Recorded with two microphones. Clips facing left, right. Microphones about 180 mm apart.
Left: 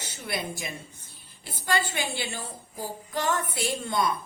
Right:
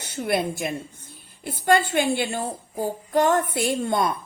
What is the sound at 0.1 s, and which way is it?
Speech, 55° right (ahead or behind).